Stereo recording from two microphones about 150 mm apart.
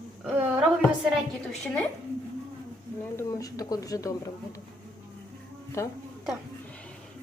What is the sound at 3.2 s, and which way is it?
Speech, 20° left (ahead or behind).